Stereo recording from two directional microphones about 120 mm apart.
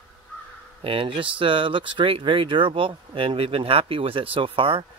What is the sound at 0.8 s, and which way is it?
Speech, 50° right (ahead or behind).